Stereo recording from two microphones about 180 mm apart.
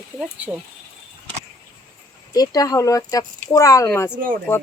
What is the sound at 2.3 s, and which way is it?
Speech, 20° left (ahead or behind).